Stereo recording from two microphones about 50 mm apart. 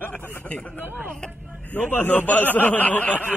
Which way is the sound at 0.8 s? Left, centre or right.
Right.